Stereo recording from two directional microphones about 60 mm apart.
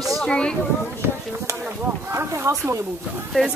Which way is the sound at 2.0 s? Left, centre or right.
Right.